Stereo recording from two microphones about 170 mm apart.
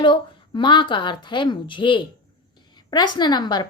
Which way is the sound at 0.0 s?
30° left (ahead or behind).